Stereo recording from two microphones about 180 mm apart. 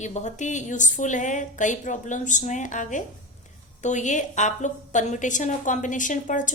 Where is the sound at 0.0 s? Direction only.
40° left (ahead or behind).